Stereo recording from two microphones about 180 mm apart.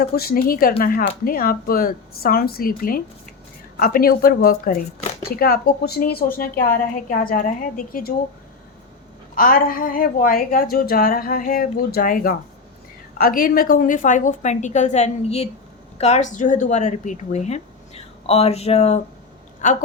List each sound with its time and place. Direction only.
0.0 s a woman's voice: 55° left (ahead or behind)
9.3 s a woman's voice: 50° left (ahead or behind)